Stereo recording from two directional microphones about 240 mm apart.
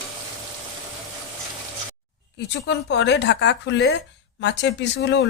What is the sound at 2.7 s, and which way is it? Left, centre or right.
A woman's voice, left.